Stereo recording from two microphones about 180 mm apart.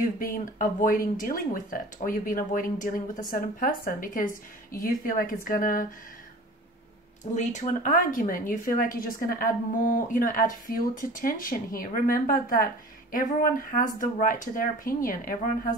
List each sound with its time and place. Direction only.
0.0 s speech: 50° left (ahead or behind)
7.3 s speech: 45° left (ahead or behind)